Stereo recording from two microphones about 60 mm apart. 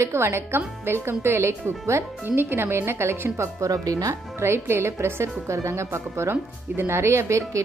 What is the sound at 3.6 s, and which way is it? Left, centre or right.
Speech, right.